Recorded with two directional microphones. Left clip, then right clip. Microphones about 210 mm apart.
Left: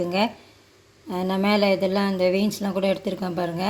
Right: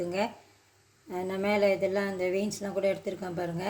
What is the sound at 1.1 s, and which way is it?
Speech, 35° left (ahead or behind).